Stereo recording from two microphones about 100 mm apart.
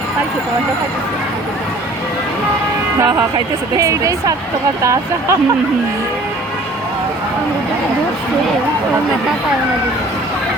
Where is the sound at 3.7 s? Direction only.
35° right (ahead or behind).